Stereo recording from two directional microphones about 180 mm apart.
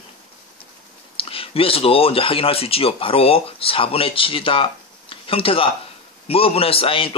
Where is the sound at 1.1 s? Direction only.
30° left (ahead or behind).